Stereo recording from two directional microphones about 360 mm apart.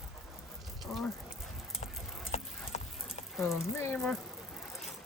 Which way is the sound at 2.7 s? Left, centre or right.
Centre.